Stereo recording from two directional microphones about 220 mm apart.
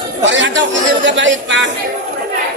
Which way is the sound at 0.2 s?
55° right (ahead or behind).